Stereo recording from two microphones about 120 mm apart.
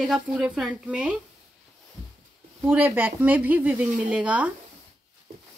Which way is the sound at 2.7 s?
15° right (ahead or behind).